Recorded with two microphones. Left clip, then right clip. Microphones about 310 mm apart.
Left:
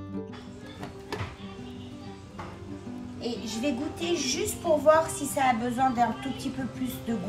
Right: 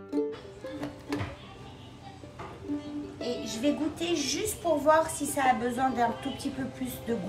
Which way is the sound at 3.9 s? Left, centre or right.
Centre.